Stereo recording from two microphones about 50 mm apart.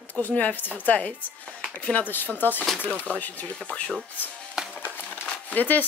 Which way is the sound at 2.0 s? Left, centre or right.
Left.